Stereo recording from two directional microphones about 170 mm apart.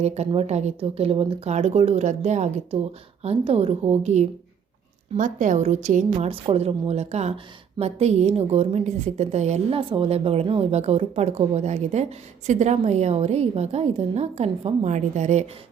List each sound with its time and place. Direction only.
0.0 s a woman's voice: 40° right (ahead or behind)